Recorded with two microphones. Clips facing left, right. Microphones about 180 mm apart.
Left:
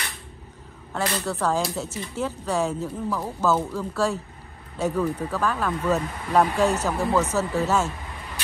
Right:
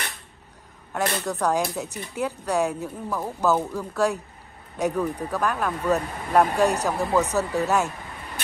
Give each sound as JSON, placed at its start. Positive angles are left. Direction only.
{"t": 1.2, "sound": "speech", "side_deg": -15}